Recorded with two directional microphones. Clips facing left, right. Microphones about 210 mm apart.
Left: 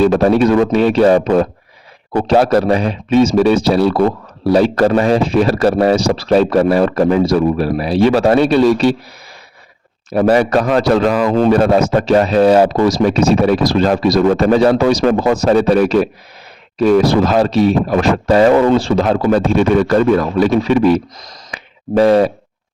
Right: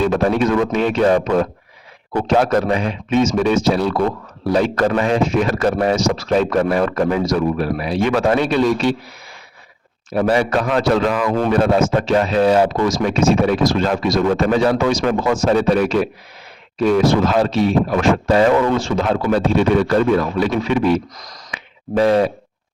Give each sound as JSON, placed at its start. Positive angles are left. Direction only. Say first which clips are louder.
{"t": 0.0, "sound": "speech", "louder": "left 5 dB", "side_deg": 35}
{"t": 10.1, "sound": "speech", "louder": "left 5 dB", "side_deg": 40}
{"t": 21.5, "sound": "a sound", "louder": "left 5 dB", "side_deg": 40}